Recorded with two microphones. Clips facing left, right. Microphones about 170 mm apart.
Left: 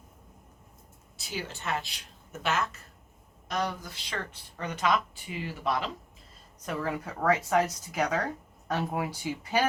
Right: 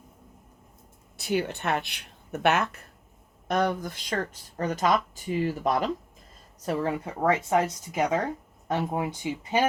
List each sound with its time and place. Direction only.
1.1 s speech: 60° right (ahead or behind)
6.6 s speech: 30° right (ahead or behind)